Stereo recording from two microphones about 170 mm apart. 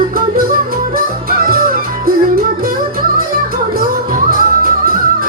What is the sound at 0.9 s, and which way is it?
Music, 60° right (ahead or behind).